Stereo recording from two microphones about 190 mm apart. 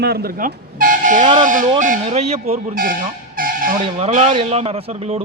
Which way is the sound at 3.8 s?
25° right (ahead or behind).